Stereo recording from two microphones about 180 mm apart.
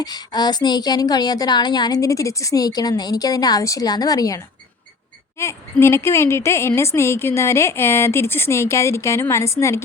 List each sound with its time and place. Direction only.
0.0 s a woman's voice: 20° left (ahead or behind)